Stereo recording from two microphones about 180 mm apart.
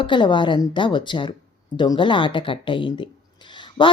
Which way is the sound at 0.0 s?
25° left (ahead or behind).